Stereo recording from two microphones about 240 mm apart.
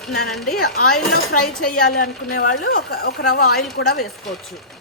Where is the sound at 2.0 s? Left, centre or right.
Left.